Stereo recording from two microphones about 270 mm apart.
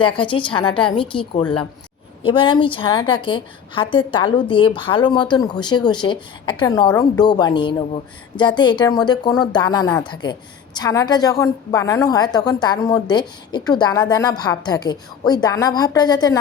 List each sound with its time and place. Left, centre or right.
0.0 s a woman's voice: centre
2.2 s a woman's voice: centre